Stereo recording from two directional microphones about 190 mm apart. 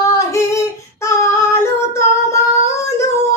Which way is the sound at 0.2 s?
15° left (ahead or behind).